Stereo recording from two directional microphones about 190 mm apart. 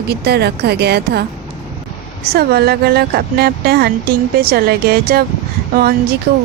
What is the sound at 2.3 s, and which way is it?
Speech, 55° right (ahead or behind).